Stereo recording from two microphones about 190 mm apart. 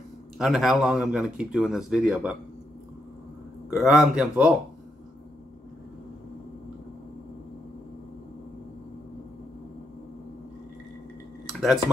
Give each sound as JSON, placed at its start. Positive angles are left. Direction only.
{"t": 0.4, "sound": "speech", "side_deg": 0}
{"t": 3.7, "sound": "speech", "side_deg": 0}